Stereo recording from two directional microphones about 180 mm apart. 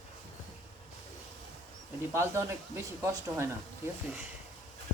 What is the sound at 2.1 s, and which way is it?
Speech, 15° right (ahead or behind).